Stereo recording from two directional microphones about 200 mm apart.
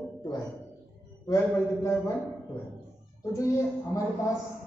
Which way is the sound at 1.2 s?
15° left (ahead or behind).